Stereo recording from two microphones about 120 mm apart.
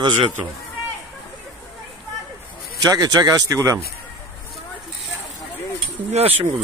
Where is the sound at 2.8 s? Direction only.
30° right (ahead or behind).